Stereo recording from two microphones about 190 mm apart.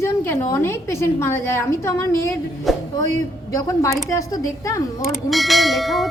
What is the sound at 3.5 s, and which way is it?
A woman's voice, 15° left (ahead or behind).